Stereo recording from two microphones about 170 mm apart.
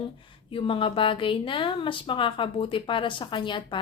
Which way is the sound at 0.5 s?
30° left (ahead or behind).